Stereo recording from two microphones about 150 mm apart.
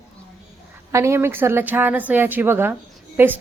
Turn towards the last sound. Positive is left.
turn(degrees=-15)  # may be behind; listen again after turning